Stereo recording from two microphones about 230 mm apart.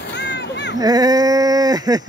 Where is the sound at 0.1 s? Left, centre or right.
Left.